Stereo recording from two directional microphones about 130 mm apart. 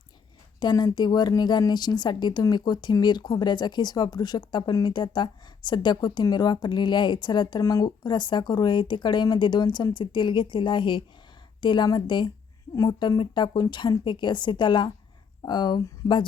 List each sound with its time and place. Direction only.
0.6 s a woman's voice: 35° left (ahead or behind)
7.6 s a woman's voice: 25° left (ahead or behind)